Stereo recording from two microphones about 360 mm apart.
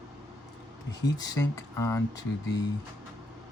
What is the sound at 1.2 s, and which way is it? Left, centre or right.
Speech, centre.